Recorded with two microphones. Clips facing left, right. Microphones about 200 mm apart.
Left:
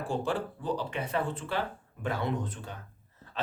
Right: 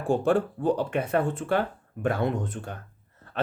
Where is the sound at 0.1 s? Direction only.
50° right (ahead or behind).